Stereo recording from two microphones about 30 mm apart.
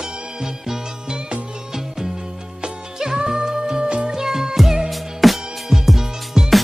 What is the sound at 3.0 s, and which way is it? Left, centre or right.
Music, centre.